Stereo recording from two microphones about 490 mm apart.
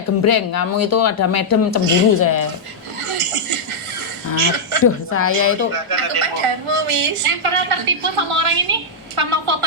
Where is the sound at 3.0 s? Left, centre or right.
Right.